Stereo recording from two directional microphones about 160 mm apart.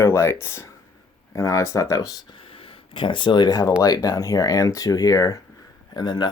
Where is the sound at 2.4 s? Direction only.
35° left (ahead or behind).